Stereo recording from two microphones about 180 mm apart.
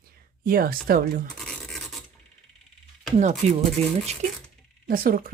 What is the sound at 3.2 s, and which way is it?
Speech, 40° right (ahead or behind).